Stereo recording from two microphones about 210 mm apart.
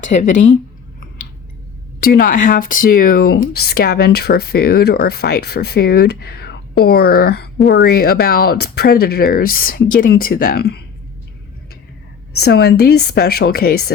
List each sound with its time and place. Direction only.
0.0 s speech: 35° left (ahead or behind)
2.0 s speech: 45° left (ahead or behind)
12.4 s speech: 50° left (ahead or behind)